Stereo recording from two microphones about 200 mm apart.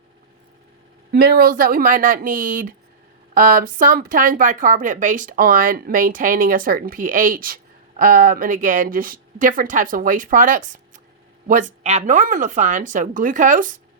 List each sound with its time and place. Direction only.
1.1 s a woman's voice: 50° right (ahead or behind)